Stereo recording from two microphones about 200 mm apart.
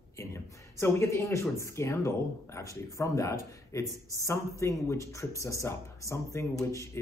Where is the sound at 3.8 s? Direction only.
15° right (ahead or behind).